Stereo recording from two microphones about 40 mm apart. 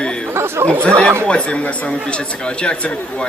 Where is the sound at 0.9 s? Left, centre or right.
Left.